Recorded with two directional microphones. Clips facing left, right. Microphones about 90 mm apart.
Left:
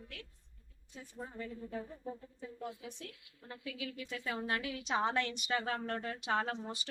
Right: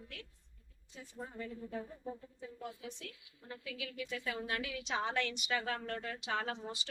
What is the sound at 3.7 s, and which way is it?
A woman's voice, 30° left (ahead or behind).